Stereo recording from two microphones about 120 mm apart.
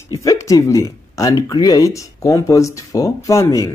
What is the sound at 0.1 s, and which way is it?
Speech, 25° left (ahead or behind).